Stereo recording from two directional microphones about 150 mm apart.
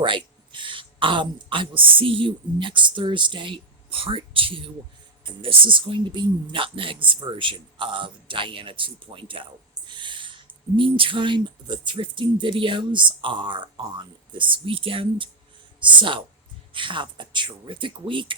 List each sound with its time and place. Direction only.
0.5 s a woman's voice: 35° right (ahead or behind)